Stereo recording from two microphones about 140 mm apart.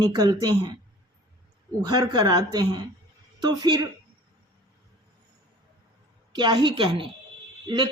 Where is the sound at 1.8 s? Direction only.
30° right (ahead or behind).